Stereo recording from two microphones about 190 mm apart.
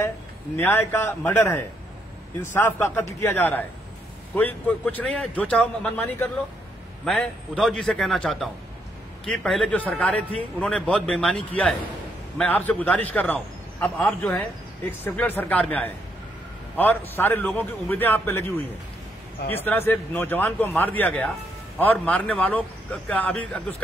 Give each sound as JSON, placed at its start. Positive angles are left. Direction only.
{"t": 0.6, "sound": "a man's voice", "side_deg": 10}
{"t": 19.5, "sound": "a man's voice", "side_deg": 10}